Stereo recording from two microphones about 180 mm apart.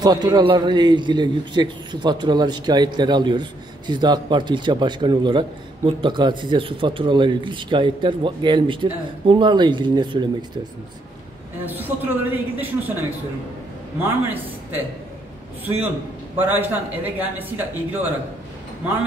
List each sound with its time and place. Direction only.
0.0 s a man's voice: 20° right (ahead or behind)
11.6 s a man's voice: 10° right (ahead or behind)
16.3 s speech: 10° right (ahead or behind)